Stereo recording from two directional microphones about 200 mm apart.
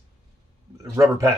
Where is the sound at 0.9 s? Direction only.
15° right (ahead or behind).